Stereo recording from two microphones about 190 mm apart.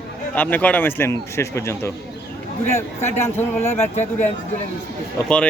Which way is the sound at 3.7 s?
35° left (ahead or behind).